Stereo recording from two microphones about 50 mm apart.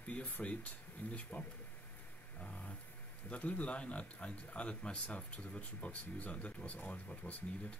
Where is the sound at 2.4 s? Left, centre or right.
Left.